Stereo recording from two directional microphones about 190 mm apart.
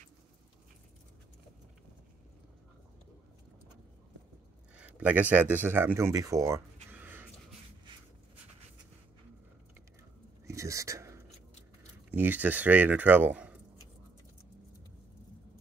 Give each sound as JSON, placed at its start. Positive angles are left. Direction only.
{"t": 4.7, "sound": "speech", "side_deg": -5}
{"t": 10.4, "sound": "a sound", "side_deg": -15}
{"t": 12.1, "sound": "speech", "side_deg": -10}